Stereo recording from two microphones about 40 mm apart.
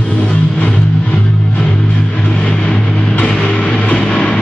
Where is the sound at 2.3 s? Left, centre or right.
Centre.